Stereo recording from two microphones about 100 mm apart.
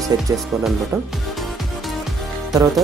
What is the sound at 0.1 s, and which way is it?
Speech, 40° right (ahead or behind).